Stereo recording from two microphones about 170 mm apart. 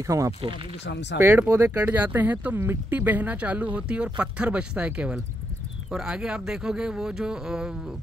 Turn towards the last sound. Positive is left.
turn(degrees=-5)  # may be behind; listen again after turning